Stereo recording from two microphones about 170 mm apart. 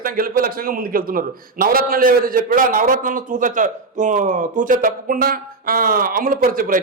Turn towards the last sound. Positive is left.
turn(degrees=-55)  # may be behind; listen again after turning